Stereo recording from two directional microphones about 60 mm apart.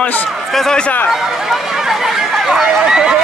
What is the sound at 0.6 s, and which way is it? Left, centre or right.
Speech, centre.